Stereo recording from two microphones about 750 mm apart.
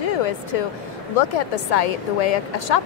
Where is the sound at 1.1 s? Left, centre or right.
Left.